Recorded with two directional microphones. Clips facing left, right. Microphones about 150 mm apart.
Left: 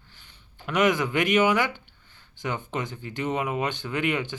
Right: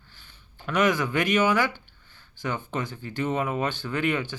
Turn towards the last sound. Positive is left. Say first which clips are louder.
# even
turn(degrees=20)  # may be behind; listen again after turning